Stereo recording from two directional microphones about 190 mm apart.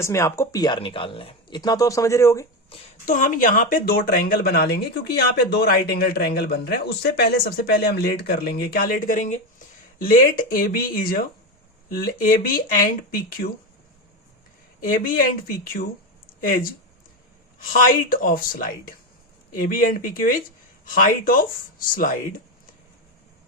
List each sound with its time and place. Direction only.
0.0 s speech: 15° left (ahead or behind)
2.7 s a woman's voice: 30° left (ahead or behind)
3.1 s a woman's voice: 45° left (ahead or behind)
14.8 s a woman's voice: 45° left (ahead or behind)